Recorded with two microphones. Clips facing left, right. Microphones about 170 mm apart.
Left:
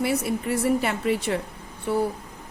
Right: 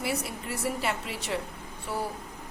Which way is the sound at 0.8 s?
55° left (ahead or behind).